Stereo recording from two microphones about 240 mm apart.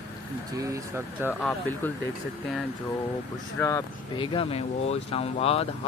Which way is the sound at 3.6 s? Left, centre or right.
Centre.